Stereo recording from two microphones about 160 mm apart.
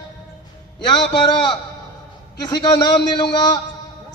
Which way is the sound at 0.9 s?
30° left (ahead or behind).